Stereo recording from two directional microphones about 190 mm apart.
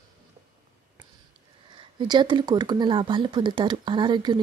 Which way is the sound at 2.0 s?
25° right (ahead or behind).